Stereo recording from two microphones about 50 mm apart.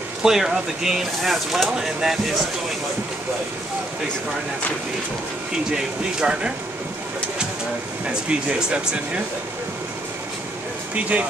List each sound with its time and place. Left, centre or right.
0.2 s speech: centre
8.1 s speech: right
11.0 s speech: right